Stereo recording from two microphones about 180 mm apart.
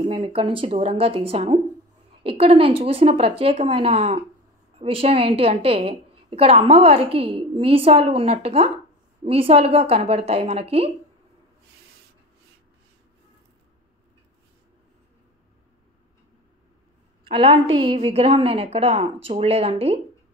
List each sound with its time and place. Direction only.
0.0 s a woman's voice: 35° right (ahead or behind)
17.2 s a woman's voice: 30° right (ahead or behind)